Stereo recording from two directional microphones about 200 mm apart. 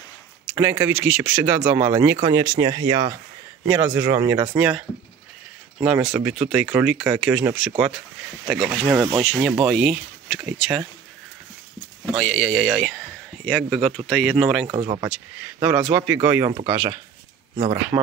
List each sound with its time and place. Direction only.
0.5 s speech: 10° right (ahead or behind)
4.6 s speech: 5° right (ahead or behind)
8.5 s speech: 5° right (ahead or behind)
8.8 s speech: 15° right (ahead or behind)
9.2 s speech: 5° left (ahead or behind)
12.2 s speech: 5° left (ahead or behind); by 18.1 s 20° right (ahead or behind)